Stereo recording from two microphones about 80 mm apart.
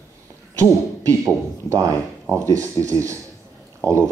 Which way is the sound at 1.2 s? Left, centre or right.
Right.